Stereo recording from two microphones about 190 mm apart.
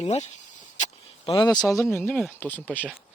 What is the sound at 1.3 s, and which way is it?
Speech, 20° left (ahead or behind).